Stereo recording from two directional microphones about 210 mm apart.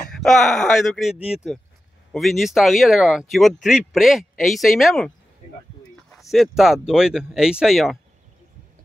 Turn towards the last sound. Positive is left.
turn(degrees=0)  # may be behind; listen again after turning